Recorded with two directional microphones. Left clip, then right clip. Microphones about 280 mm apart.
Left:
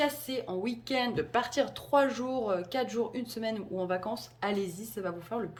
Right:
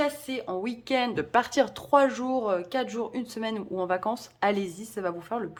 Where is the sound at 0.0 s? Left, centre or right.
Centre.